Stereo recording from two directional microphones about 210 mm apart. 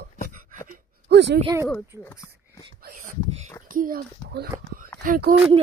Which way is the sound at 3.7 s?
40° right (ahead or behind).